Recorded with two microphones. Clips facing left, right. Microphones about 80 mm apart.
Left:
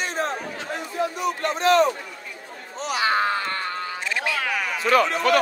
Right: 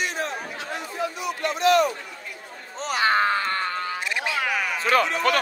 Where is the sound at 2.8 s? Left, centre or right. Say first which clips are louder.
Right 1 dB; right.